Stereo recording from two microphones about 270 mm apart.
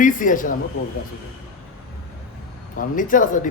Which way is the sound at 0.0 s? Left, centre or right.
Left.